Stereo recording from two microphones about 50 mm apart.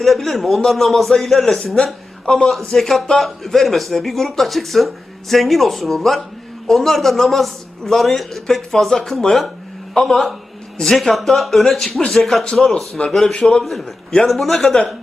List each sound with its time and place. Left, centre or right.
0.0 s a man's voice: centre
1.6 s speech: centre
2.5 s a man's voice: centre
11.9 s speech: centre
12.1 s a man's voice: centre